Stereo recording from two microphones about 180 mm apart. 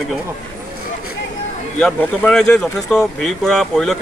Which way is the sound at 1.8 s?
5° left (ahead or behind).